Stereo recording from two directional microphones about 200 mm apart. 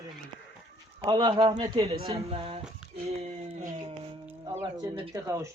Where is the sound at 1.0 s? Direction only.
25° right (ahead or behind).